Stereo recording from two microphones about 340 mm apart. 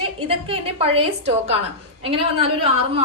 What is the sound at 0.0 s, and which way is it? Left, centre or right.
A woman's voice, centre.